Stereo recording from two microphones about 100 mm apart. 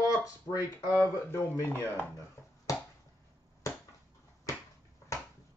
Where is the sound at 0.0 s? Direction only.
35° left (ahead or behind).